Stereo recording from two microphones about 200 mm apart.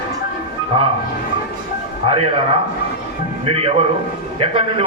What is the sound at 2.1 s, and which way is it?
A man's voice, 30° right (ahead or behind).